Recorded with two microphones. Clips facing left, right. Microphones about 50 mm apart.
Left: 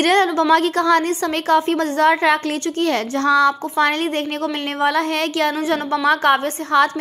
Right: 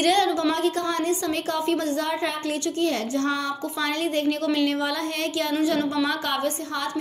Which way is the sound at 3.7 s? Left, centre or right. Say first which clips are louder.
Left 7 dB; left.